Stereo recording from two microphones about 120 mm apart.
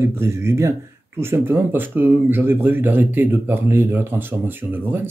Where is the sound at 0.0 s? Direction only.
20° right (ahead or behind).